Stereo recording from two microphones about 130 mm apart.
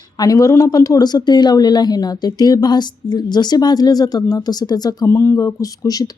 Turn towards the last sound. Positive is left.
turn(degrees=30)  # may be behind; listen again after turning